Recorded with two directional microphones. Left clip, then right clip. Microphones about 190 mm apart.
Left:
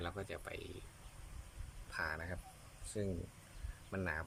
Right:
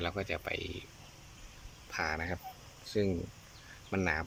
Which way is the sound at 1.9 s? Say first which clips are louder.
Right 7 dB; 20° right (ahead or behind).